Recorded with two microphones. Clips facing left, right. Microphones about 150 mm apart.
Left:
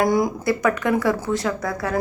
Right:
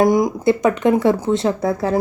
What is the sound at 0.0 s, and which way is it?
A woman's voice, 20° right (ahead or behind).